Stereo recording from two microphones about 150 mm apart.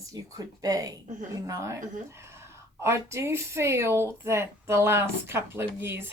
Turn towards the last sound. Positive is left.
turn(degrees=-15)  # may be behind; listen again after turning